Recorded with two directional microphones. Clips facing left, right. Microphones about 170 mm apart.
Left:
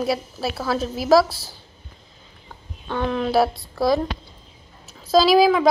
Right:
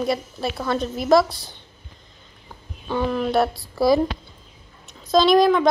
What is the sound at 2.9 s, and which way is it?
A woman's voice, 5° right (ahead or behind).